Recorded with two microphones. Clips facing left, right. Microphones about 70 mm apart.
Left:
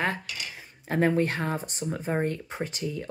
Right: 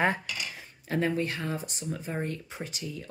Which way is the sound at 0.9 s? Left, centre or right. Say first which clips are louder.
Left 4 dB; left.